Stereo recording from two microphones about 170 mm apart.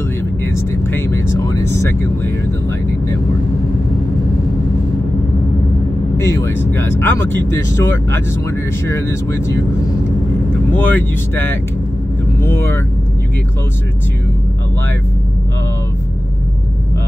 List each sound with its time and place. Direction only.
0.6 s vehicle: 15° left (ahead or behind)
6.1 s speech: 15° left (ahead or behind)
10.7 s speech: 10° left (ahead or behind)
12.4 s speech: 15° left (ahead or behind)